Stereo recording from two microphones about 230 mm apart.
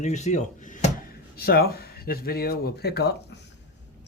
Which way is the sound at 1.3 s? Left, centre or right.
Left.